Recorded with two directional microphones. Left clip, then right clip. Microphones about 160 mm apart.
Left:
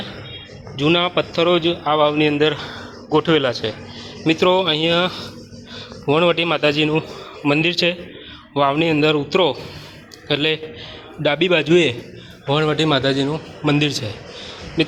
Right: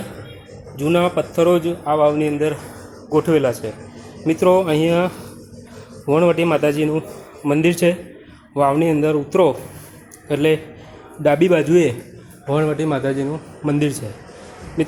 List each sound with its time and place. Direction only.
0.8 s a man's voice: 5° right (ahead or behind)
11.3 s a man's voice: centre (ahead or behind)